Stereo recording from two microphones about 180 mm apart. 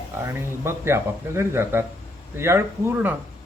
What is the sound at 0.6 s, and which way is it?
A man's voice, 15° right (ahead or behind).